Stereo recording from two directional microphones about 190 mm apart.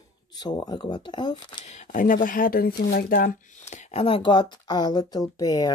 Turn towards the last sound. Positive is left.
turn(degrees=20)  # may be behind; listen again after turning